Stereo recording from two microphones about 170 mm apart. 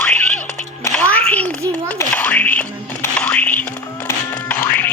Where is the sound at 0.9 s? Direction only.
10° left (ahead or behind).